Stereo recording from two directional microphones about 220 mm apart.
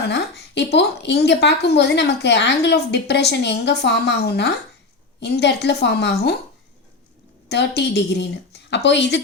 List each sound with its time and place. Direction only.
0.1 s a woman's voice: 50° left (ahead or behind)
7.4 s a woman's voice: 50° left (ahead or behind)